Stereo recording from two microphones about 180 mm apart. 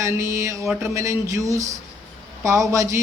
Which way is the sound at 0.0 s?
15° right (ahead or behind).